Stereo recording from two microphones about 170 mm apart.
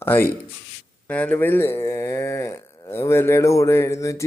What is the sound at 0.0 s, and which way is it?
Speech, 15° left (ahead or behind).